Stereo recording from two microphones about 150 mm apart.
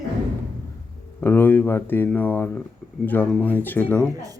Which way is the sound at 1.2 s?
15° left (ahead or behind).